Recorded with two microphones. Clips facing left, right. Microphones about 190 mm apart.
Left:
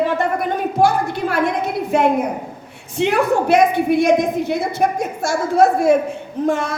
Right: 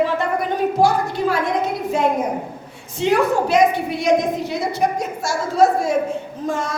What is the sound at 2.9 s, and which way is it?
Speech, 60° left (ahead or behind).